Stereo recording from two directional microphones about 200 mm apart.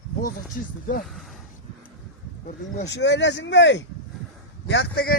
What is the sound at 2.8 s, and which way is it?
Speech, 60° left (ahead or behind).